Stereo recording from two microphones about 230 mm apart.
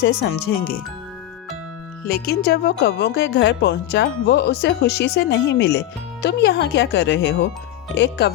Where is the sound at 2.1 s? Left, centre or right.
Left.